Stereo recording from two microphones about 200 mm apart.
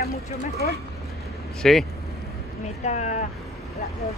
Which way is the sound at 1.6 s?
Centre (ahead or behind).